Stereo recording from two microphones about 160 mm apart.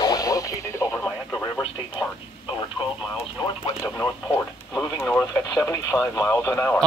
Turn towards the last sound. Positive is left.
turn(degrees=10)  # may be behind; listen again after turning